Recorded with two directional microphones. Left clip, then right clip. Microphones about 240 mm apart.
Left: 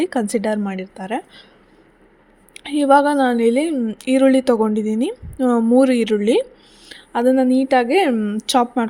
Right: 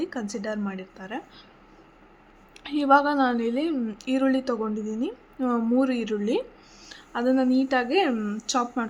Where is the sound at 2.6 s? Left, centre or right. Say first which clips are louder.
Left 6 dB; left.